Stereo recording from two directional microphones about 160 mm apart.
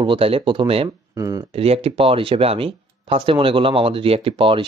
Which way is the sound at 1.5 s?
40° right (ahead or behind).